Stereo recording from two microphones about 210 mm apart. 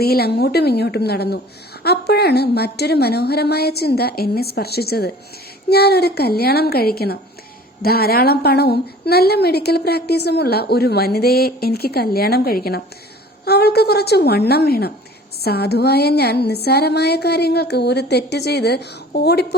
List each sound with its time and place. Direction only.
0.0 s a woman's voice: 50° left (ahead or behind)